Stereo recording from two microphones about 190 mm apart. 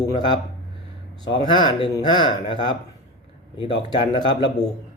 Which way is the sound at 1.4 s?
25° left (ahead or behind).